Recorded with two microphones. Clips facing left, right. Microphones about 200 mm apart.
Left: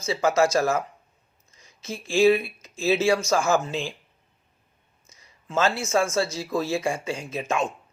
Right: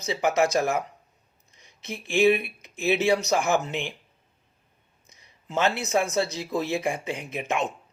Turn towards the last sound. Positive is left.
turn(degrees=-20)  # may be behind; listen again after turning